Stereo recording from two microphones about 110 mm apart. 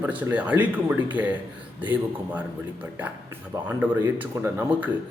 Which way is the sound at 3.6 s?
15° right (ahead or behind).